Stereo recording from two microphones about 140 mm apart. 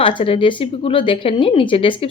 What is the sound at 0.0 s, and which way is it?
Speech, 40° left (ahead or behind).